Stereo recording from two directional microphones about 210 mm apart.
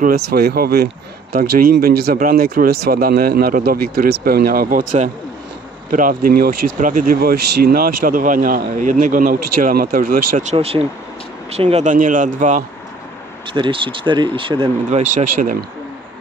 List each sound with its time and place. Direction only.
0.0 s speech: 50° right (ahead or behind)
13.5 s speech: 25° right (ahead or behind)